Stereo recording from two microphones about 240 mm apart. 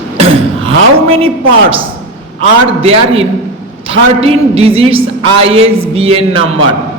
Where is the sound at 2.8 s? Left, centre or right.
Right.